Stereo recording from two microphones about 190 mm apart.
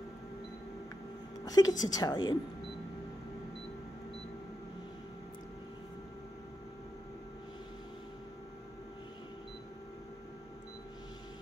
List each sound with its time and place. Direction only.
1.4 s a woman's voice: 20° left (ahead or behind)